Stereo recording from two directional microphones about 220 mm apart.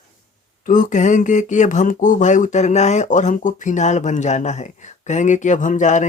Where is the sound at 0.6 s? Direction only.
35° left (ahead or behind).